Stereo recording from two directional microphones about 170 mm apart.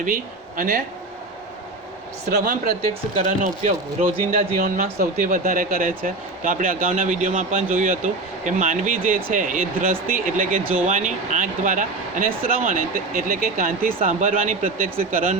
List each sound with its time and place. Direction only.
0.0 s speech: 55° right (ahead or behind)
3.2 s speech: 50° right (ahead or behind)